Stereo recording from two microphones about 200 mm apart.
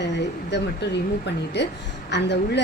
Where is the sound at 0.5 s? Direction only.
60° left (ahead or behind).